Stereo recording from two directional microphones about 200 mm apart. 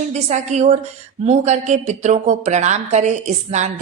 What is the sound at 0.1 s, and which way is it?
Speech, 35° right (ahead or behind).